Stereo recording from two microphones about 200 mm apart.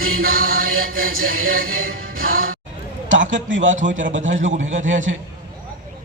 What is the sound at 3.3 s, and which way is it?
A man's voice, 70° right (ahead or behind).